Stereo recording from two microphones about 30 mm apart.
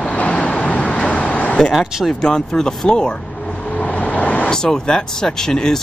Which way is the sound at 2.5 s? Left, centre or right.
Centre.